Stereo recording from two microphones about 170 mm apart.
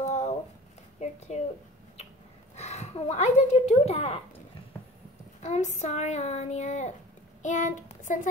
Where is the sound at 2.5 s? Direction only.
40° left (ahead or behind).